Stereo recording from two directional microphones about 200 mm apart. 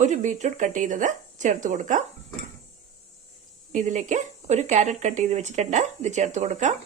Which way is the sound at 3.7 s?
40° right (ahead or behind).